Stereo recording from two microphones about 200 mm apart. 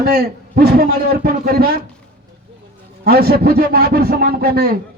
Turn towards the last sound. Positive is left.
turn(degrees=-50)  # may be behind; listen again after turning